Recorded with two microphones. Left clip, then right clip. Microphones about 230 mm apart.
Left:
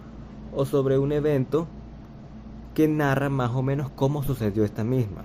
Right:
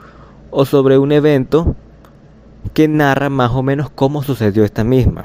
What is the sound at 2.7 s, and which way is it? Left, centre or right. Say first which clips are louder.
Speech: right 10 dB; right.